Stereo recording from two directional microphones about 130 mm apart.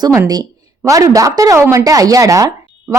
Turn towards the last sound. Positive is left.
turn(degrees=-25)  # may be behind; listen again after turning